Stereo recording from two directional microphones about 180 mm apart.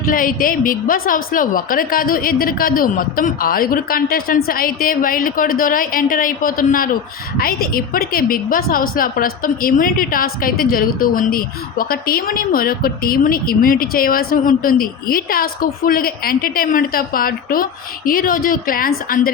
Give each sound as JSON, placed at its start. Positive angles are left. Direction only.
{"t": 0.0, "sound": "a woman's voice", "side_deg": 50}